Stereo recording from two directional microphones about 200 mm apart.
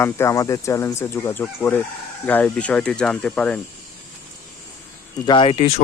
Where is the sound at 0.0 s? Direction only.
15° left (ahead or behind).